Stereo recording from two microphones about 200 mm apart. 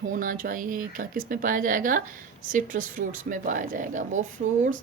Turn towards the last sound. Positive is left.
turn(degrees=-35)  # may be behind; listen again after turning